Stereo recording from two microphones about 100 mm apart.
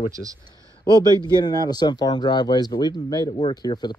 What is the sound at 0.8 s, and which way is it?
Speech, 45° left (ahead or behind).